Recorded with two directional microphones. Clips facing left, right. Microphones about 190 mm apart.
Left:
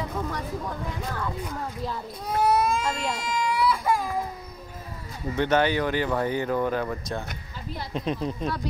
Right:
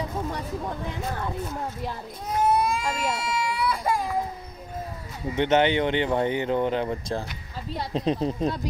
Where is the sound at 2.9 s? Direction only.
10° right (ahead or behind).